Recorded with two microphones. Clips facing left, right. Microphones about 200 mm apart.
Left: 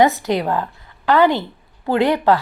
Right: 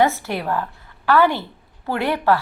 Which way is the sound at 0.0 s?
15° left (ahead or behind).